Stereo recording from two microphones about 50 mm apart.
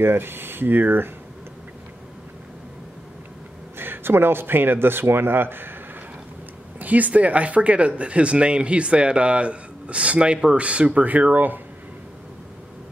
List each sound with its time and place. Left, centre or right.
0.0 s speech: right
3.7 s a man's voice: right
6.8 s speech: right